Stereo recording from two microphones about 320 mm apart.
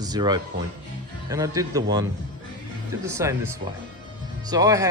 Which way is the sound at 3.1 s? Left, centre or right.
Centre.